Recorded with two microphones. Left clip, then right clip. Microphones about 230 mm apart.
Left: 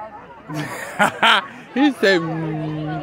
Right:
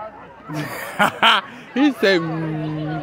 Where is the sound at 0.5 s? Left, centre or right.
Centre.